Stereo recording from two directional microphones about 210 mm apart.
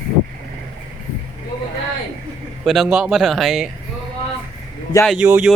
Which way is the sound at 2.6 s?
Centre (ahead or behind).